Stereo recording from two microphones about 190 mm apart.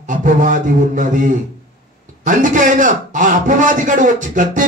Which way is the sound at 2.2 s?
45° right (ahead or behind).